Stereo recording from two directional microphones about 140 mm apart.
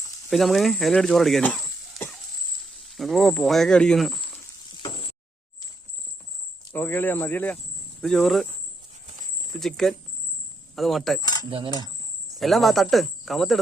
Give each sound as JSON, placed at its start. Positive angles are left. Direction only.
{"t": 0.3, "sound": "speech", "side_deg": 0}
{"t": 2.9, "sound": "speech", "side_deg": 0}
{"t": 4.8, "sound": "a sound", "side_deg": 45}
{"t": 6.7, "sound": "speech", "side_deg": 15}
{"t": 8.0, "sound": "speech", "side_deg": 5}
{"t": 9.6, "sound": "speech", "side_deg": 0}
{"t": 11.2, "sound": "cutlery", "side_deg": 25}
{"t": 12.4, "sound": "speech", "side_deg": 0}